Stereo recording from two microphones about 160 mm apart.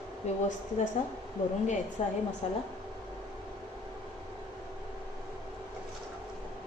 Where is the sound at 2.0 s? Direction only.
40° left (ahead or behind).